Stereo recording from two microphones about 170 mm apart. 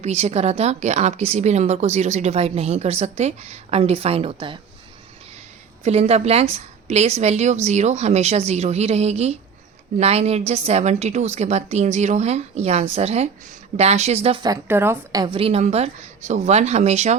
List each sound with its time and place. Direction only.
0.0 s a woman's voice: 40° right (ahead or behind)
5.8 s a woman's voice: 35° right (ahead or behind)
14.4 s a woman's voice: 15° right (ahead or behind); by 17.2 s 40° right (ahead or behind)